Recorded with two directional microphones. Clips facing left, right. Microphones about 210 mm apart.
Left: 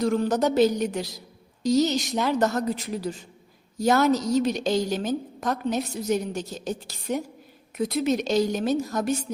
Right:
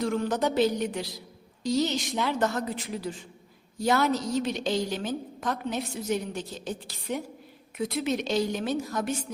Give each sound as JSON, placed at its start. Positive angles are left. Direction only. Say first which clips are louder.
{"t": 0.0, "sound": "a woman's voice", "louder": "left 4 dB", "side_deg": 40}